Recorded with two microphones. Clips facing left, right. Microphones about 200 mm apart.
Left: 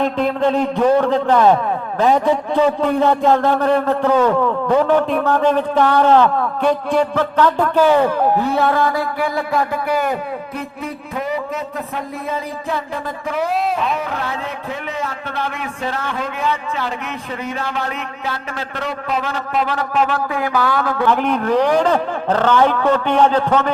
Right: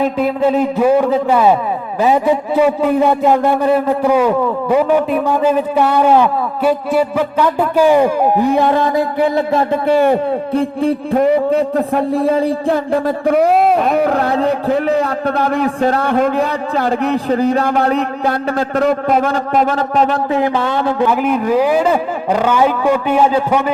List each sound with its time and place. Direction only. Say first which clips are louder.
0.0 s a man's voice: right 3 dB; 5° right (ahead or behind); by 12.7 s 30° right (ahead or behind)
13.5 s speech: right 7 dB; 55° right (ahead or behind)
14.3 s a man's voice: right 12 dB; 35° right (ahead or behind)
16.0 s a man's voice: right 8 dB; 50° right (ahead or behind); by 17.6 s 35° right (ahead or behind)
17.6 s a man's voice: right 10 dB; 50° right (ahead or behind)
19.7 s a man's voice: right 4 dB; 35° right (ahead or behind)
20.3 s a man's voice: right 4 dB; 25° right (ahead or behind)
21.1 s a man's voice: right 2 dB; 5° right (ahead or behind)